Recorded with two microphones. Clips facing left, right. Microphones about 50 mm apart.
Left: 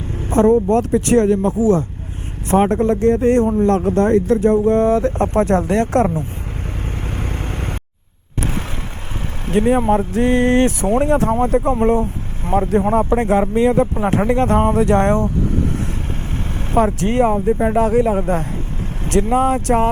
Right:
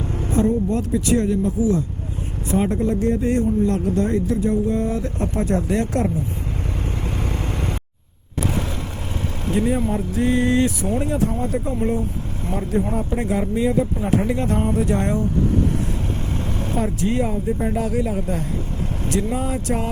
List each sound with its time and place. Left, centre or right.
0.2 s speech: left
6.8 s vehicle: left
9.5 s speech: left
16.7 s speech: left